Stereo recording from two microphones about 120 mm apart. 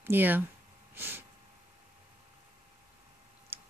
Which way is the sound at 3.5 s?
15° right (ahead or behind).